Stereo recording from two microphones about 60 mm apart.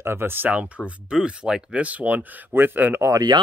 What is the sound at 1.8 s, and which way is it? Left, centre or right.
Speech, right.